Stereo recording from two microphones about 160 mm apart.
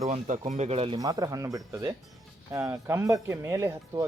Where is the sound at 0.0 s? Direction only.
45° right (ahead or behind).